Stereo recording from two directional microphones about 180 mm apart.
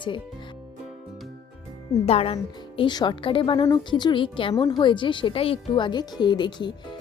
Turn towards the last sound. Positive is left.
turn(degrees=25)  # may be behind; listen again after turning